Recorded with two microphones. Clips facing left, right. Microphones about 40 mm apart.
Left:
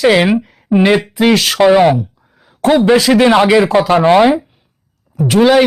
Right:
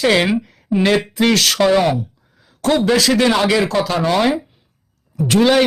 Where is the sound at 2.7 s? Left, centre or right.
Left.